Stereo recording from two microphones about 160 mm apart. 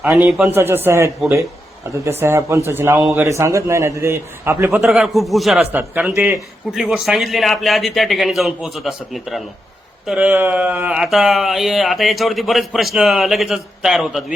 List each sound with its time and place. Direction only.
0.3 s speech: centre (ahead or behind)
0.5 s speech: 15° right (ahead or behind)
4.8 s speech: centre (ahead or behind)